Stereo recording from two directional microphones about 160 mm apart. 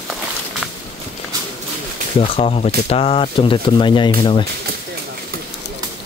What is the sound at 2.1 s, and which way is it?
Speech, 40° left (ahead or behind).